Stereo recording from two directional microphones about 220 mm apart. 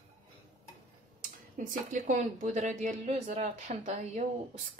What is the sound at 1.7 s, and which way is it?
Speech, 35° right (ahead or behind).